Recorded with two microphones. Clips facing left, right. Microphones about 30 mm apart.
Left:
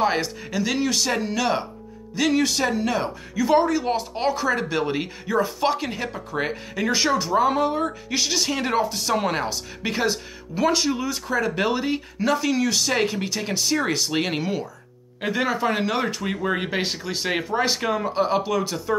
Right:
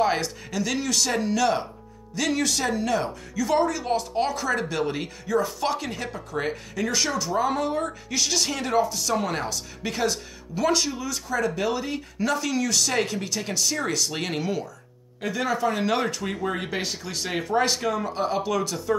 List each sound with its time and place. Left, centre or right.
0.0 s speech: centre
8.6 s speech: left
10.9 s speech: left
15.5 s speech: left
15.8 s speech: centre
17.5 s speech: centre
17.7 s speech: left